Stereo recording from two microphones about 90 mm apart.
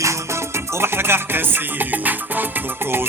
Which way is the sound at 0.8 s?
25° right (ahead or behind).